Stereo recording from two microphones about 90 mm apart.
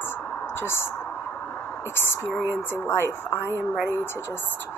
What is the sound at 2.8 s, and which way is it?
Speech, 30° left (ahead or behind).